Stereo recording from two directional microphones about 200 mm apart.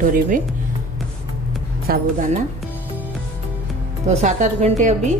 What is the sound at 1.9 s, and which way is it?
Speech, 50° right (ahead or behind).